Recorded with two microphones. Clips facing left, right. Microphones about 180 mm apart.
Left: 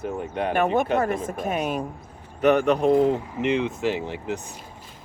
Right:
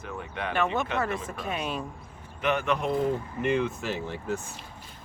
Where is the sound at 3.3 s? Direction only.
20° left (ahead or behind).